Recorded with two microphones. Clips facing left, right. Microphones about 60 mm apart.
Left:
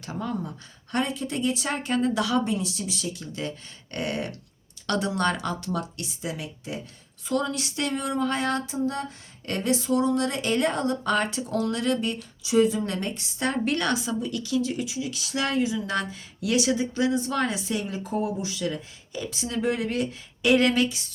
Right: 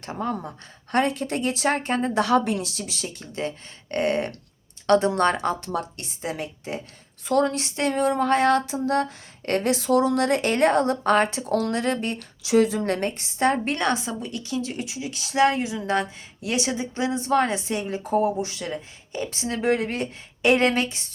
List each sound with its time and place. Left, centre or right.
0.0 s speech: right
2.4 s a woman's voice: right
3.1 s a woman's voice: right
12.4 s a woman's voice: right
15.9 s a woman's voice: right